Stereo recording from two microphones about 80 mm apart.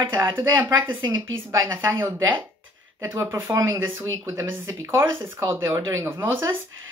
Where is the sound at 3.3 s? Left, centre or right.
Right.